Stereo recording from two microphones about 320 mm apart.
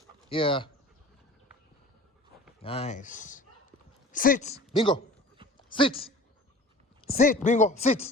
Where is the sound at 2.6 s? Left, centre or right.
Centre.